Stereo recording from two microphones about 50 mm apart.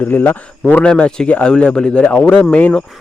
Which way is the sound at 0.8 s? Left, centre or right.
Centre.